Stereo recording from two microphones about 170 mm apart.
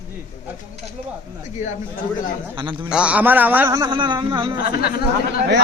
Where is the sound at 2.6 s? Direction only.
30° right (ahead or behind).